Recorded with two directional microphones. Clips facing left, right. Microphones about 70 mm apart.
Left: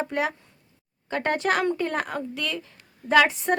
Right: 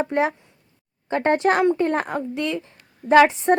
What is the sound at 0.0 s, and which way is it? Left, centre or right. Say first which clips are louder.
Speech: right 5 dB; right.